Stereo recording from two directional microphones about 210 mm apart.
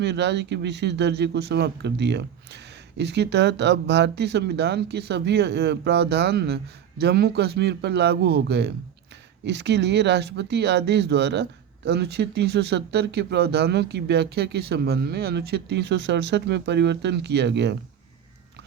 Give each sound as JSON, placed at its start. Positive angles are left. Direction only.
{"t": 0.0, "sound": "speech", "side_deg": -55}